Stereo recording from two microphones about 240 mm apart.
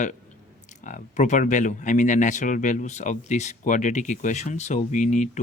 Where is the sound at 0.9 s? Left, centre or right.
Left.